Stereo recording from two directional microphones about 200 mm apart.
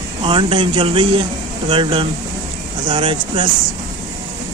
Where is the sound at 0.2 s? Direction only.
25° right (ahead or behind).